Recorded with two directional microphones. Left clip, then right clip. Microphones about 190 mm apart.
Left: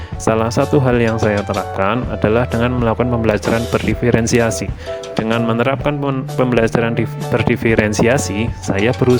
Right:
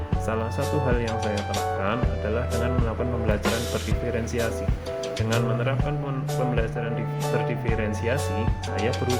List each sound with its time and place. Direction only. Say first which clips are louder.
0.3 s speech: left 13 dB; 55° left (ahead or behind)